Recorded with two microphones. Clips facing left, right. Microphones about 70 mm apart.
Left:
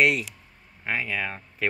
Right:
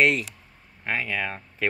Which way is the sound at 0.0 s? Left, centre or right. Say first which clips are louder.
Right 1 dB; centre.